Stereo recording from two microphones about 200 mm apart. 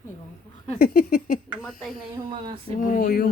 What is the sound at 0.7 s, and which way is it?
Speech, 45° left (ahead or behind).